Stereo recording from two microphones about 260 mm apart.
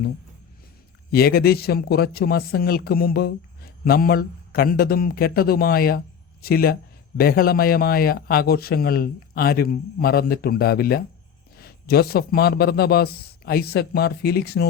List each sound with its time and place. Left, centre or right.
1.1 s a man's voice: left